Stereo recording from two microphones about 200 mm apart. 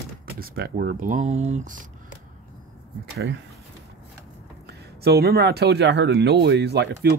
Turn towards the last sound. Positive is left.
turn(degrees=-55)  # may be behind; listen again after turning